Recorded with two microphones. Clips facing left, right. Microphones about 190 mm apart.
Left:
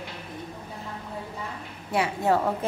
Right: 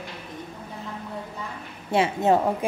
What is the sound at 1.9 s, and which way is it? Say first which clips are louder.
Speech: right 3 dB; 25° right (ahead or behind).